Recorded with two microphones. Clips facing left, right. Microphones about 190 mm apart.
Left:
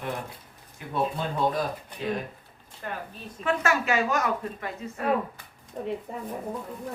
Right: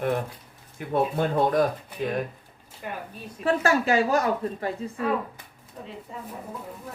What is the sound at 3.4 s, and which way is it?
Speech, 35° right (ahead or behind).